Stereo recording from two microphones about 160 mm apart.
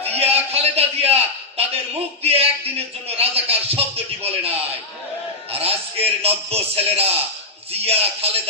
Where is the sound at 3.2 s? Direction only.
40° right (ahead or behind).